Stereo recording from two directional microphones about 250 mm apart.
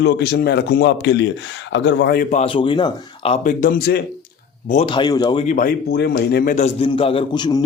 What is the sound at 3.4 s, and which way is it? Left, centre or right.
Speech, left.